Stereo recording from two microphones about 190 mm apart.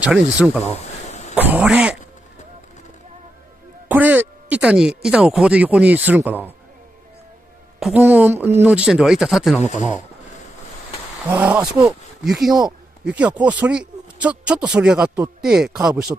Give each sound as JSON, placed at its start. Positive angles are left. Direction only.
{"t": 0.0, "sound": "speech", "side_deg": -5}
{"t": 0.7, "sound": "a sound", "side_deg": 35}
{"t": 1.3, "sound": "speech", "side_deg": -10}
{"t": 3.9, "sound": "speech", "side_deg": -10}
{"t": 7.8, "sound": "speech", "side_deg": -5}
{"t": 9.6, "sound": "speech", "side_deg": 40}
{"t": 11.2, "sound": "speech", "side_deg": -10}